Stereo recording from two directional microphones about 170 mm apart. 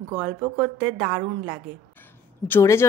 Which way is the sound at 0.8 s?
5° right (ahead or behind).